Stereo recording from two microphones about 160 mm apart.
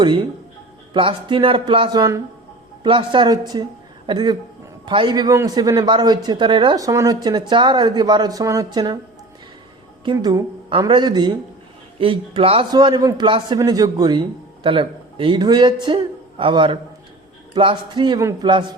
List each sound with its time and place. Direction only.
0.0 s a man's voice: 30° right (ahead or behind)
10.0 s a man's voice: 25° right (ahead or behind)